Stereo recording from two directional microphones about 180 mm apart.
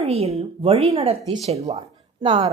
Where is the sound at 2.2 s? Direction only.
25° right (ahead or behind).